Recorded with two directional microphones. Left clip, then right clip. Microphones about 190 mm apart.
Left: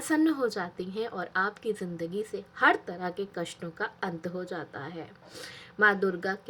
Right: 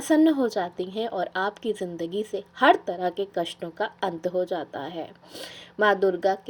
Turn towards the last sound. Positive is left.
turn(degrees=-20)  # may be behind; listen again after turning